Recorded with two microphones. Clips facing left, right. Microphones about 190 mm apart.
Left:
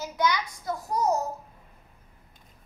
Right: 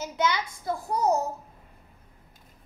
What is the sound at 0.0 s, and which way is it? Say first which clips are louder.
A child's voice: even; 25° right (ahead or behind).